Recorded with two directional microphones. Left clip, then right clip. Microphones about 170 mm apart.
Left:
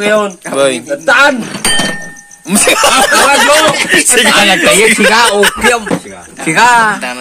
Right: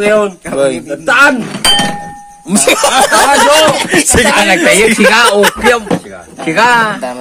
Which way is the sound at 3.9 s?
30° right (ahead or behind).